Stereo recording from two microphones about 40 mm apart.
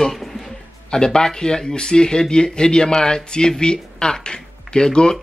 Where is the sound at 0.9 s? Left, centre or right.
Centre.